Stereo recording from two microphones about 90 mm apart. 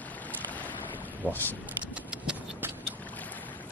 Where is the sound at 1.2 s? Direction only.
20° left (ahead or behind).